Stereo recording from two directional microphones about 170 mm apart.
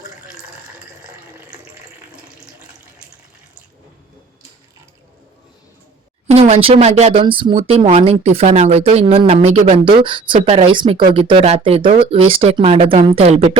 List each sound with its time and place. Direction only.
2.1 s water tap: 5° right (ahead or behind)
6.3 s speech: 35° right (ahead or behind)